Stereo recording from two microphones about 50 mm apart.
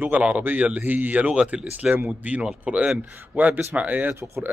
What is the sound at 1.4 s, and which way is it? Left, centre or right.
A man's voice, centre.